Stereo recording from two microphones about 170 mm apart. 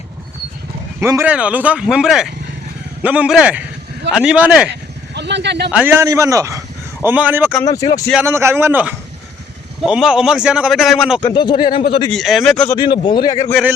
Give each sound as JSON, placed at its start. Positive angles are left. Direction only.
{"t": 0.9, "sound": "a man's voice", "side_deg": -15}
{"t": 4.7, "sound": "sheep", "side_deg": -90}
{"t": 5.7, "sound": "speech", "side_deg": -15}
{"t": 7.6, "sound": "speech", "side_deg": 20}
{"t": 8.2, "sound": "a man's voice", "side_deg": -15}
{"t": 11.2, "sound": "speech", "side_deg": 25}
{"t": 12.1, "sound": "a man's voice", "side_deg": 0}
{"t": 12.7, "sound": "speech", "side_deg": 25}